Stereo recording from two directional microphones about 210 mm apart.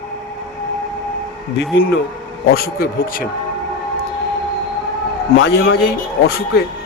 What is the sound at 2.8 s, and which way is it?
Speech, 45° left (ahead or behind).